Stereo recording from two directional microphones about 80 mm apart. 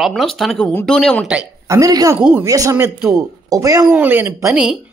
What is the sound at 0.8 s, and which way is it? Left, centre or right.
Speech, centre.